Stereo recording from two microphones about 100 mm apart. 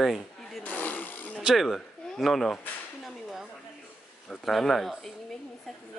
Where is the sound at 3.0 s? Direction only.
5° right (ahead or behind).